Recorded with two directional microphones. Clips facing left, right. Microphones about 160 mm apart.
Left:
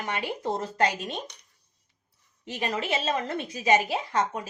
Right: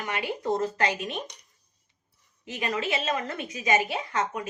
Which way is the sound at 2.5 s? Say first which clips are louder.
Even; 35° left (ahead or behind).